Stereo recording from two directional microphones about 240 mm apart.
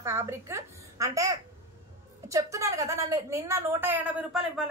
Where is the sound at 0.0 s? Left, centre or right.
Centre.